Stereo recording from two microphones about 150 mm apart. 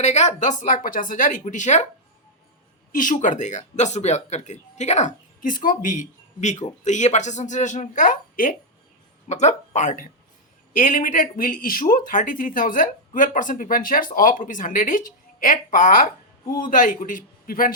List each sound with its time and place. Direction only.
0.0 s speech: 50° left (ahead or behind)
2.9 s speech: 60° left (ahead or behind)
9.3 s a man's voice: 50° left (ahead or behind); by 17.7 s 70° left (ahead or behind)